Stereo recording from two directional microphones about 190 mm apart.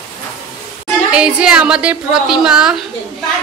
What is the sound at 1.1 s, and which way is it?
A woman's voice, 5° right (ahead or behind).